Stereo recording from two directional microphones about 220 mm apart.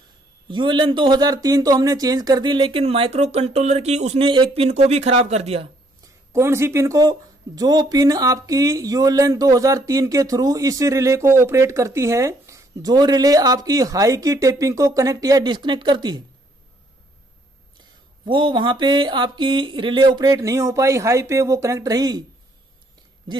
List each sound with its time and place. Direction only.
0.5 s speech: 20° right (ahead or behind)
6.3 s speech: 10° right (ahead or behind)
18.2 s speech: 20° right (ahead or behind)